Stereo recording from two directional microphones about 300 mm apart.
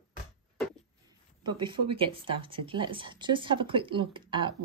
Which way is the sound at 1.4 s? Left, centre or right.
Centre.